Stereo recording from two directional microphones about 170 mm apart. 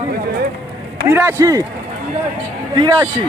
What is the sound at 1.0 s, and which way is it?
Speech, 15° right (ahead or behind).